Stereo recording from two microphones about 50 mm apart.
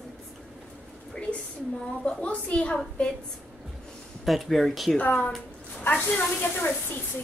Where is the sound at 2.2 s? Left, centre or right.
Left.